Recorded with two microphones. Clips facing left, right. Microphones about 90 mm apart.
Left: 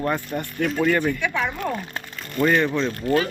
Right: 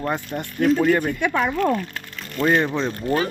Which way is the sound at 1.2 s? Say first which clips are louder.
Right 3 dB; 45° right (ahead or behind).